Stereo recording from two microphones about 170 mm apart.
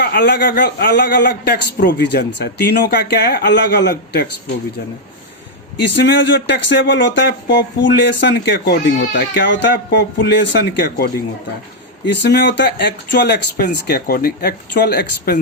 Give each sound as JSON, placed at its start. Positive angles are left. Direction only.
{"t": 0.0, "sound": "a man's voice", "side_deg": 75}
{"t": 5.9, "sound": "speech", "side_deg": 90}
{"t": 12.1, "sound": "a man's voice", "side_deg": 90}